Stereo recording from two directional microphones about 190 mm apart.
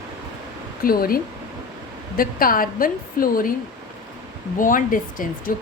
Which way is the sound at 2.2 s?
50° left (ahead or behind).